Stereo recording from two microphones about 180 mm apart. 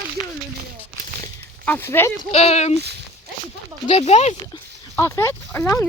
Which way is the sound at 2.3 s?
35° left (ahead or behind).